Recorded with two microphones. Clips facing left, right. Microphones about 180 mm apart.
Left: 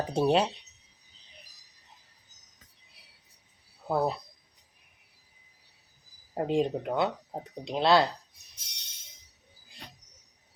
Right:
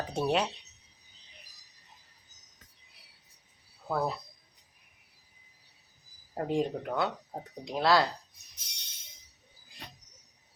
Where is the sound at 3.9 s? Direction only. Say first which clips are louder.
Left 3 dB; 20° left (ahead or behind).